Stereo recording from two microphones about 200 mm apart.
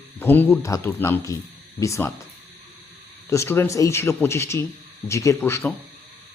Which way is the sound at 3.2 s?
15° left (ahead or behind).